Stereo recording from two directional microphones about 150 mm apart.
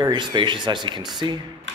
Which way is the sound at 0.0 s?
30° right (ahead or behind).